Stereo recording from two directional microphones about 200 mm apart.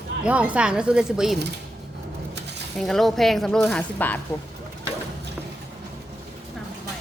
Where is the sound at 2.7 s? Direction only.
Centre (ahead or behind).